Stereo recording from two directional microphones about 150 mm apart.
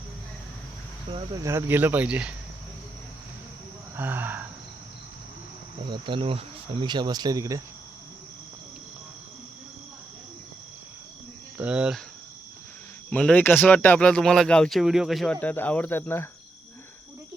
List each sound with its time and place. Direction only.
1.4 s speech: 20° right (ahead or behind)
3.9 s speech: 15° right (ahead or behind)
5.8 s speech: 35° right (ahead or behind)
11.5 s speech: 10° right (ahead or behind)
13.1 s speech: 5° left (ahead or behind)